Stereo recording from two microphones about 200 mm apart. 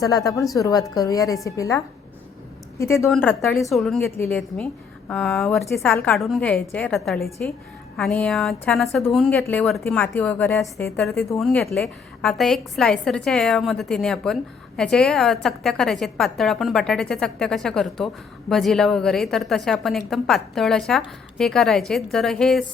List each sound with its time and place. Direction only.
0.0 s a woman's voice: 15° left (ahead or behind); by 4.0 s centre (ahead or behind)
4.0 s a woman's voice: 10° left (ahead or behind)